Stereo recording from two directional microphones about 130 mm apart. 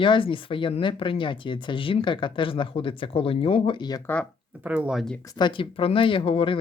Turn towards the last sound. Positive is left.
turn(degrees=45)  # may be behind; listen again after turning